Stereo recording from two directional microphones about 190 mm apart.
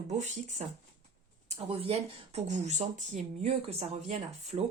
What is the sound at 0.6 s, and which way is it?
Speech, 35° right (ahead or behind).